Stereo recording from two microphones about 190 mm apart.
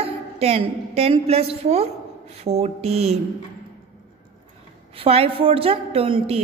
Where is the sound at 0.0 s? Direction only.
30° right (ahead or behind).